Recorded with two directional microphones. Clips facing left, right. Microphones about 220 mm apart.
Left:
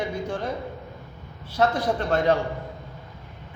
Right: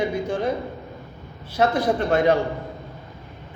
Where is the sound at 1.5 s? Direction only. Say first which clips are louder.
Right 3 dB; 10° right (ahead or behind).